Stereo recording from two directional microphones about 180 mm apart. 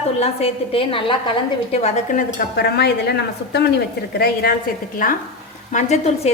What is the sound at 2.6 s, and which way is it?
Speech, 65° left (ahead or behind).